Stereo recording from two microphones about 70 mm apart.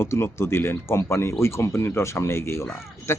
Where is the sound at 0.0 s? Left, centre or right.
Left.